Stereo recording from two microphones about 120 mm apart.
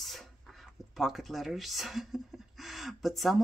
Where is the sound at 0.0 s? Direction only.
Centre (ahead or behind).